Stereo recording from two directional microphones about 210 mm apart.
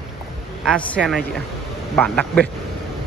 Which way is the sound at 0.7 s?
5° left (ahead or behind).